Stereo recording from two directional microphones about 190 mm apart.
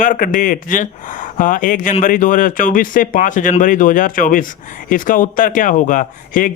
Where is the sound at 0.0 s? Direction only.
45° left (ahead or behind).